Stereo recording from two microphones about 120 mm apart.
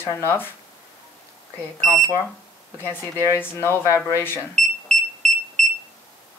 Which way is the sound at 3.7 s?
20° right (ahead or behind).